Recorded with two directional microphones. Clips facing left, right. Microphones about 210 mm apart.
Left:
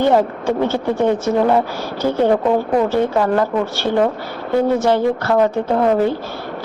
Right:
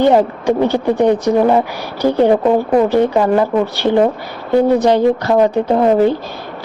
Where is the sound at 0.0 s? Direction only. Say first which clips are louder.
Right 3 dB; 15° right (ahead or behind).